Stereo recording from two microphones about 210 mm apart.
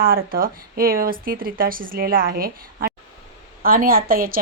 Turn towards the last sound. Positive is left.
turn(degrees=-45)  # may be behind; listen again after turning